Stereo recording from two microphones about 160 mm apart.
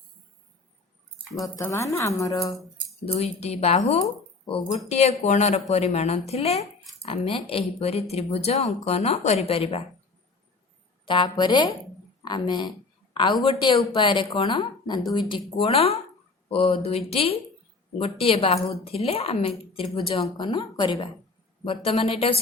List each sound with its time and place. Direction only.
1.4 s a woman's voice: 20° left (ahead or behind)
3.1 s speech: 40° left (ahead or behind)
11.0 s a woman's voice: 30° left (ahead or behind)